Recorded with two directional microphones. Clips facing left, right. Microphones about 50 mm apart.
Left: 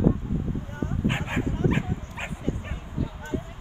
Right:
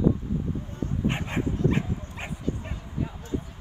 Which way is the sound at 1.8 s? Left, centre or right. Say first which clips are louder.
Even; left.